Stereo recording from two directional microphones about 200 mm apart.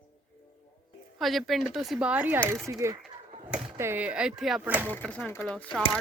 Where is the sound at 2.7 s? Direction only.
15° right (ahead or behind).